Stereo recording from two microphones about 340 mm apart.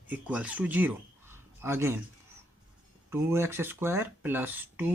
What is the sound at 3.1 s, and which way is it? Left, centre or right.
Speech, centre.